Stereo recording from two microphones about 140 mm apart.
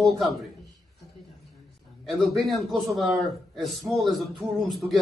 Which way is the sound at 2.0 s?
Centre (ahead or behind).